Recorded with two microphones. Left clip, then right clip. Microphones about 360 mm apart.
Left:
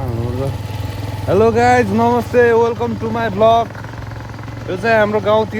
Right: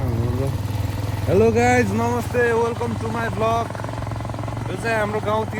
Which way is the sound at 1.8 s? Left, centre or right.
Left.